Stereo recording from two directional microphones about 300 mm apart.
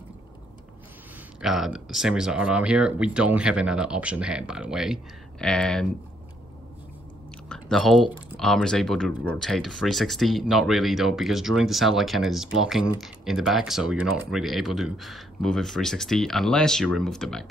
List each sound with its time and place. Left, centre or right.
1.4 s speech: centre
7.4 s chewing: centre
8.4 s speech: centre